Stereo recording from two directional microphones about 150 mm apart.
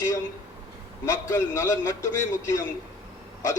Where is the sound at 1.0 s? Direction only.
20° left (ahead or behind).